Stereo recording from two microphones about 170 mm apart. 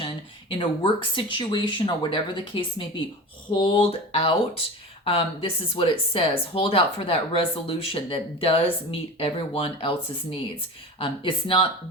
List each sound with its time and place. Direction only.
0.6 s speech: 30° left (ahead or behind)
11.0 s speech: 30° left (ahead or behind)